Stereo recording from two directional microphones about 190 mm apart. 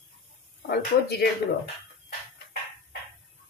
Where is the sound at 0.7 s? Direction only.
55° left (ahead or behind).